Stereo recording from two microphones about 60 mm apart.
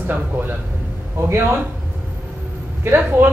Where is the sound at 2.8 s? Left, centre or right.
Right.